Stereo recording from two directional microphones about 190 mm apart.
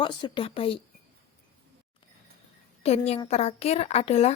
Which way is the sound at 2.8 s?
35° left (ahead or behind).